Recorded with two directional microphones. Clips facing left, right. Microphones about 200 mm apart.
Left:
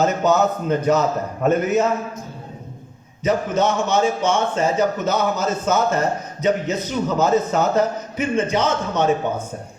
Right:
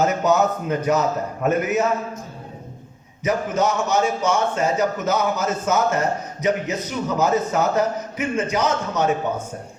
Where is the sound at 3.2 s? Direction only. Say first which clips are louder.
Left 2 dB; 30° left (ahead or behind).